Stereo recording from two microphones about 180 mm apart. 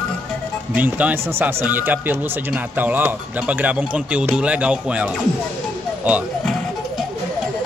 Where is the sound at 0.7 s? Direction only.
10° right (ahead or behind).